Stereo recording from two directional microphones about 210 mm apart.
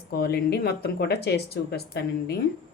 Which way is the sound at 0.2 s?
50° left (ahead or behind).